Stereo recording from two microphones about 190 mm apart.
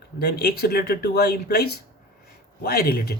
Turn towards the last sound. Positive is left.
turn(degrees=55)  # may be behind; listen again after turning